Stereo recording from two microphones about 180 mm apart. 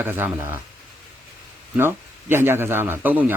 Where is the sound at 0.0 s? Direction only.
10° right (ahead or behind).